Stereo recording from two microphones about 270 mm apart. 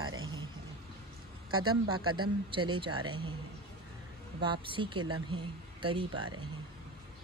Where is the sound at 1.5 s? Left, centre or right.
Right.